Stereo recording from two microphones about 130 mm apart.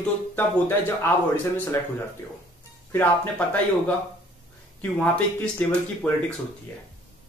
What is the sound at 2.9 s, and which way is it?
Speech, 15° left (ahead or behind).